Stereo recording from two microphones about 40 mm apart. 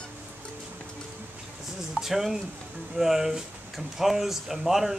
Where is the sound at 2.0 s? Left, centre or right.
Centre.